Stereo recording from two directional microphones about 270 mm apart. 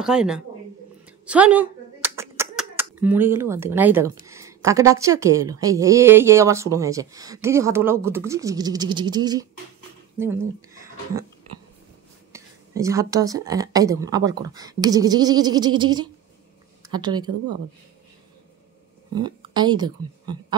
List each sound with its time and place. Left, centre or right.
0.0 s speech: centre
1.0 s clapping: centre
4.3 s a woman's voice: centre
12.3 s a woman's voice: centre
19.1 s speech: centre